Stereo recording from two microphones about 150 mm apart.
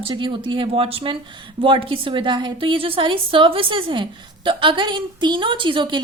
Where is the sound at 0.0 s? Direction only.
35° right (ahead or behind).